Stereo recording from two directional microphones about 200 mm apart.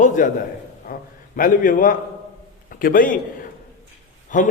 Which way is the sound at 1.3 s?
40° left (ahead or behind).